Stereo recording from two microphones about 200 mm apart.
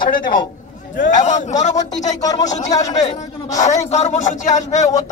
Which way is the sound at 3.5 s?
35° left (ahead or behind).